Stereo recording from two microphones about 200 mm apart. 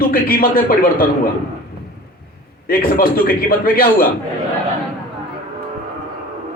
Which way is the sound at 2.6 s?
45° left (ahead or behind).